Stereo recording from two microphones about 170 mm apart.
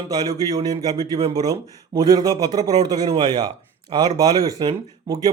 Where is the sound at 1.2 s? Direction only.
35° right (ahead or behind).